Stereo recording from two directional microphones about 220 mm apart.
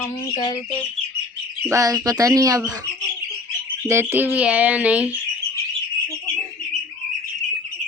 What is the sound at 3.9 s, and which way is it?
Speech, 10° right (ahead or behind).